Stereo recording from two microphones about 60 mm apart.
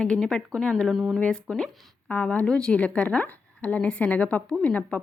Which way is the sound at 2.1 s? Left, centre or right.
Left.